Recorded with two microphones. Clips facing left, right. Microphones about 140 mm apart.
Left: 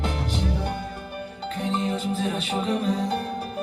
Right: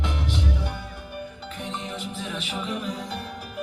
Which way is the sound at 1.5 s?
35° left (ahead or behind).